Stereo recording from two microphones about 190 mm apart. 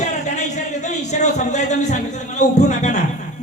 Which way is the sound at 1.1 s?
40° left (ahead or behind).